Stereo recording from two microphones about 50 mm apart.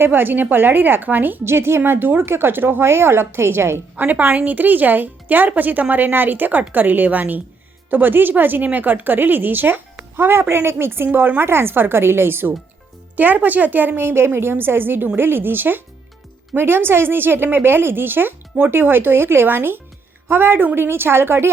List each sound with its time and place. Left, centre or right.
0.0 s speech: right
1.5 s speech: right
1.8 s speech: right
3.9 s speech: right
13.1 s speech: right